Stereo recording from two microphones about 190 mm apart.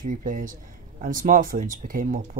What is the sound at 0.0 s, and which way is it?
Speech, 45° right (ahead or behind).